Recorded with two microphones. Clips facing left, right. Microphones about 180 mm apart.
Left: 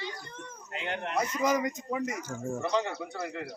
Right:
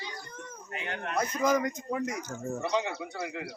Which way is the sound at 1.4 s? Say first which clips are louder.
Right 2 dB; centre (ahead or behind).